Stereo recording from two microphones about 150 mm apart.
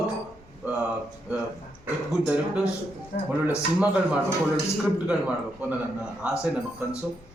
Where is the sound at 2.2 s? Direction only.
10° right (ahead or behind).